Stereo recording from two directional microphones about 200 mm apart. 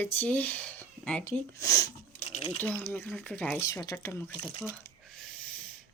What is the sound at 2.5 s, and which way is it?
Speech, 10° left (ahead or behind).